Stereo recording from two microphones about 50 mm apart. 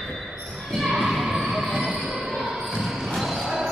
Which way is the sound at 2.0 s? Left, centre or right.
Centre.